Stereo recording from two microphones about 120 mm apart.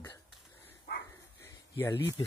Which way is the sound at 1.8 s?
20° left (ahead or behind).